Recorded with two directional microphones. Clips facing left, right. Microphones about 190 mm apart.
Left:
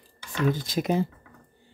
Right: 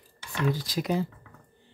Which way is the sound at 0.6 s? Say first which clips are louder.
Left 3 dB; 25° left (ahead or behind).